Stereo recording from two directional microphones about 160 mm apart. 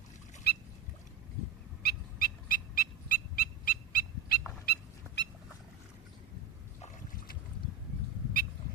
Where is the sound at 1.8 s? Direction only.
70° left (ahead or behind).